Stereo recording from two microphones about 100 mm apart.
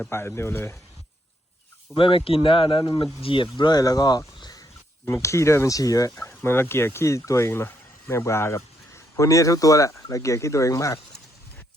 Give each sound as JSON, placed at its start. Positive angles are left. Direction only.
{"t": 0.1, "sound": "speech", "side_deg": 25}
{"t": 2.0, "sound": "speech", "side_deg": 60}
{"t": 2.8, "sound": "speech", "side_deg": 50}
{"t": 3.2, "sound": "speech", "side_deg": 60}
{"t": 4.4, "sound": "a sound", "side_deg": 45}
{"t": 5.0, "sound": "speech", "side_deg": 30}